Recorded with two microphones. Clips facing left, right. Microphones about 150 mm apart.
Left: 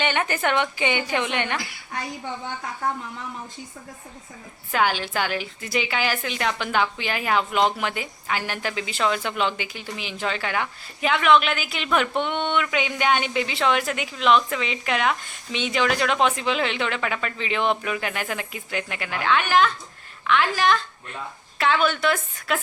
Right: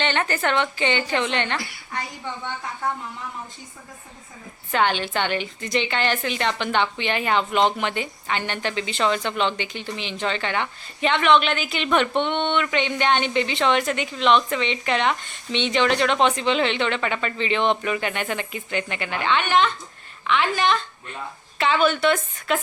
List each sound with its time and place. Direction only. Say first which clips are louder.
0.0 s a woman's voice: even; 10° left (ahead or behind)
4.7 s a woman's voice: right 1 dB; 5° left (ahead or behind)